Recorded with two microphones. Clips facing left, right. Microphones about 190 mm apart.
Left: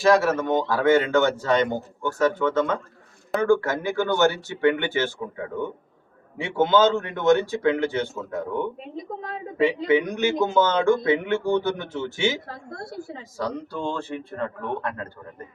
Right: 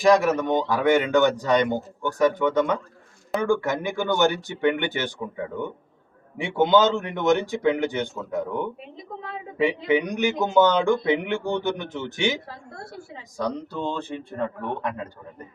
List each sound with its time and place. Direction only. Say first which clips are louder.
0.0 s a man's voice: right 1 dB; 15° right (ahead or behind)
6.3 s a man's voice: right 1 dB; 15° right (ahead or behind)
9.1 s a sound: left 1 dB; 35° left (ahead or behind)
9.6 s a man's voice: left 1 dB; 15° right (ahead or behind)
13.3 s a man's voice: right 1 dB; 20° right (ahead or behind)